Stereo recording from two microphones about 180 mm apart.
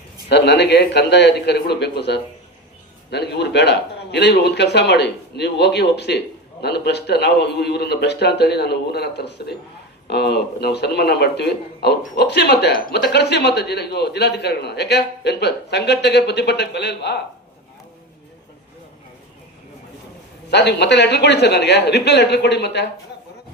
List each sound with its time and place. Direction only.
0.3 s speech: 70° left (ahead or behind)
20.5 s speech: 70° left (ahead or behind)